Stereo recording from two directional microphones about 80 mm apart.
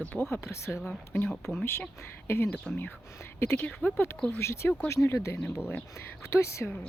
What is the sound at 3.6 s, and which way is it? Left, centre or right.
Speech, left.